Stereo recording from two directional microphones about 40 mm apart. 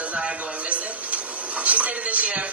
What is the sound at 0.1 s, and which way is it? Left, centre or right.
A man's voice, right.